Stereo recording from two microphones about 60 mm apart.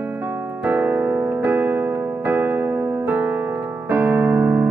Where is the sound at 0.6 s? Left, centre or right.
Right.